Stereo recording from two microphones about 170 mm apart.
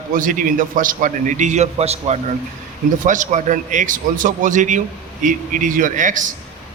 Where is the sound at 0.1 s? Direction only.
50° right (ahead or behind).